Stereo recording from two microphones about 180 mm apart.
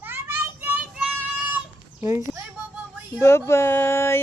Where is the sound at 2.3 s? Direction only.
10° right (ahead or behind).